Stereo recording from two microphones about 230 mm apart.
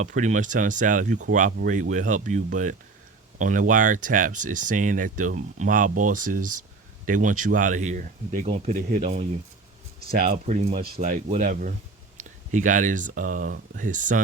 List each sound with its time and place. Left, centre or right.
0.0 s speech: right